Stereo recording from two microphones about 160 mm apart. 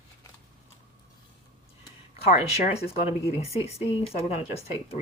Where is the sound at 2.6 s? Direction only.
40° left (ahead or behind).